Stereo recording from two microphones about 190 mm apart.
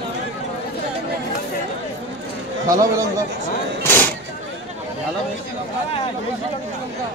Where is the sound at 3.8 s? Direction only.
10° left (ahead or behind).